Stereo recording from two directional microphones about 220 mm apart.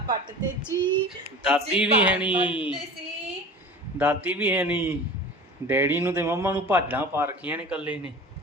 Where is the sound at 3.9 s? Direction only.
5° right (ahead or behind).